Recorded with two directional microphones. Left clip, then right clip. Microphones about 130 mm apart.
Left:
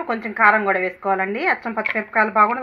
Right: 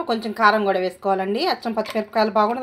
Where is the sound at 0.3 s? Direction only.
10° right (ahead or behind).